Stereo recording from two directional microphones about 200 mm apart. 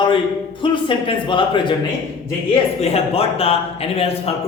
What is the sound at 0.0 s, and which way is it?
A man's voice, 25° left (ahead or behind).